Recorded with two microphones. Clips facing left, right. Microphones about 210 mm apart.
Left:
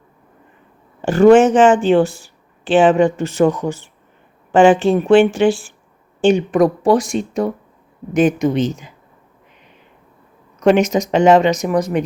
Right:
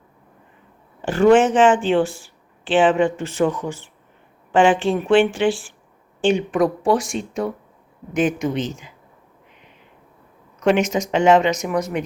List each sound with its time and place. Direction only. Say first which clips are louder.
1.0 s speech: left 5 dB; 45° left (ahead or behind)
10.6 s speech: left 5 dB; 40° left (ahead or behind)